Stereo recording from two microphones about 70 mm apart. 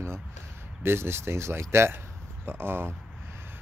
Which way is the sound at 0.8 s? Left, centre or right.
Right.